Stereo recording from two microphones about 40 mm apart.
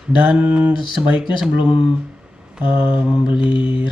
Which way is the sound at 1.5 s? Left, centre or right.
Right.